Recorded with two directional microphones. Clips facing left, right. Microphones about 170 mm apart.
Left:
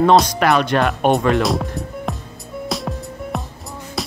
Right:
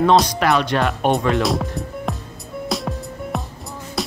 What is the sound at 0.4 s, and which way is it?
Speech, 55° left (ahead or behind).